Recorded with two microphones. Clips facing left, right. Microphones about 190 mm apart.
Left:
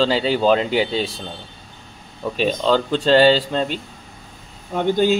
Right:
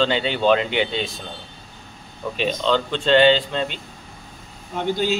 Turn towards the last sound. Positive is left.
turn(degrees=50)  # may be behind; listen again after turning